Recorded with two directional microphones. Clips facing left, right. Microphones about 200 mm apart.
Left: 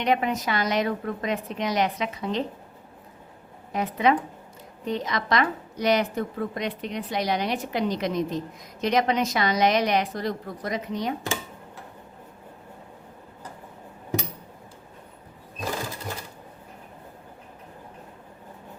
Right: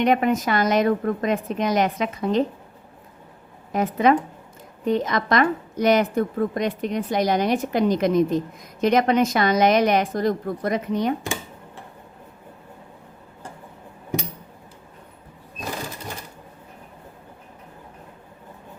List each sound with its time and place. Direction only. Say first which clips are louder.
0.0 s a woman's voice: right 5 dB; 50° right (ahead or behind)
3.7 s a woman's voice: right 4 dB; 45° right (ahead or behind)